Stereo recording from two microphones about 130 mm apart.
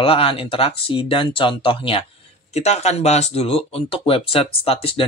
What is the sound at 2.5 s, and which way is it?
Speech, 55° left (ahead or behind).